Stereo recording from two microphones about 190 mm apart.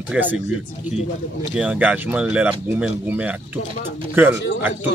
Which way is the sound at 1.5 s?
5° right (ahead or behind).